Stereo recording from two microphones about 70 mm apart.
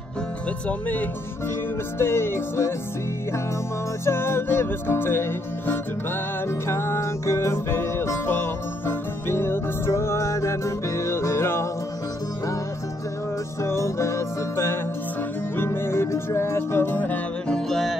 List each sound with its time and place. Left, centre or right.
0.7 s speech: left
2.0 s music: left
4.0 s music: left
13.6 s music: left
17.5 s music: centre